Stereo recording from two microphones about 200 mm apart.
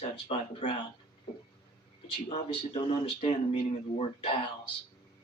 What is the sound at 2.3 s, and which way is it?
Speech, 30° left (ahead or behind).